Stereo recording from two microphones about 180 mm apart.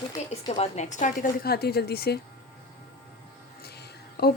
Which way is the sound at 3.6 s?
60° left (ahead or behind).